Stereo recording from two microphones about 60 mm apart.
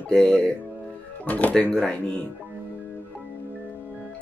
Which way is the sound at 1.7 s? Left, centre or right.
Centre.